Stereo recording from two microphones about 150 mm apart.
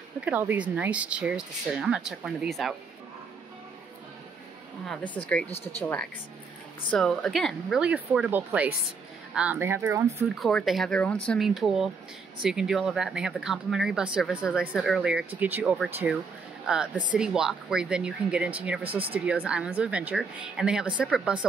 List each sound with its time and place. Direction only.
0.2 s speech: 10° right (ahead or behind)
4.8 s a woman's voice: 10° left (ahead or behind)
6.9 s speech: 5° left (ahead or behind); by 10.2 s 20° right (ahead or behind)
10.4 s speech: centre (ahead or behind)